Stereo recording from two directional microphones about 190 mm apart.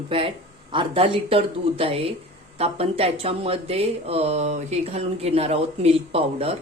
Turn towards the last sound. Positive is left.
turn(degrees=-30)  # may be behind; listen again after turning